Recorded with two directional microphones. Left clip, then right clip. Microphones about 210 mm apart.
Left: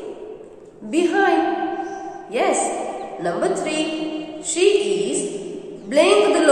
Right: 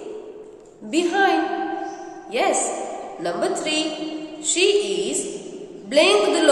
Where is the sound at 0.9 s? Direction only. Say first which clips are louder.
Left 1 dB; 20° right (ahead or behind).